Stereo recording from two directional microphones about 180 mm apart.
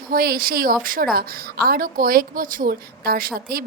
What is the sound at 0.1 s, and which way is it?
A woman's voice, 55° right (ahead or behind).